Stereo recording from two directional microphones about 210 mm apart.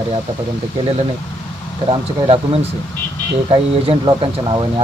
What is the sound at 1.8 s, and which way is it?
Speech, 25° right (ahead or behind).